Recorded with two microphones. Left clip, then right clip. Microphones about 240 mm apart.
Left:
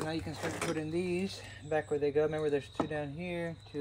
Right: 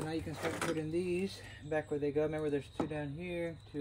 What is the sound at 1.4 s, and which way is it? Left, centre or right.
Speech, left.